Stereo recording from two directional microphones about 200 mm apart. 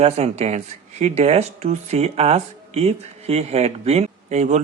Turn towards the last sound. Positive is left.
turn(degrees=-35)  # may be behind; listen again after turning